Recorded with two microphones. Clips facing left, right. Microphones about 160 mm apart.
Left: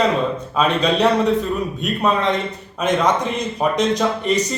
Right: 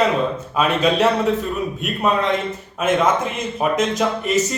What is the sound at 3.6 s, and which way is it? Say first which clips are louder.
Speech: left 1 dB; 5° right (ahead or behind).